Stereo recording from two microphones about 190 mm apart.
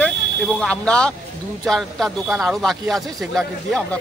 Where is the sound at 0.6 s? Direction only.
5° left (ahead or behind).